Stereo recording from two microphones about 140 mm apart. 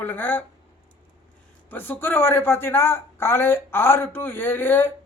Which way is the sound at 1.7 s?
15° left (ahead or behind).